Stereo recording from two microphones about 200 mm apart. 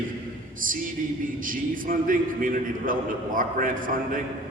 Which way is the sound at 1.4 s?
45° right (ahead or behind).